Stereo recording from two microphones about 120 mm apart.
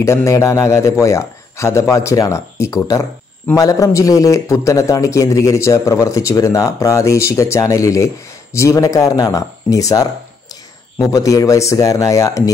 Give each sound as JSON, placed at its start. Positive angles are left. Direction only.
{"t": 0.0, "sound": "a man's voice", "side_deg": 25}